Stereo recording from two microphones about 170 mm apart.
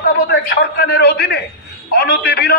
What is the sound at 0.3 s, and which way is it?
A man's voice, 70° left (ahead or behind).